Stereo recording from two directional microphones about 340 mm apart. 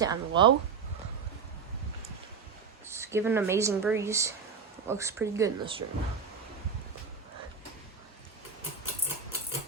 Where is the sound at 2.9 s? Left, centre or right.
Centre.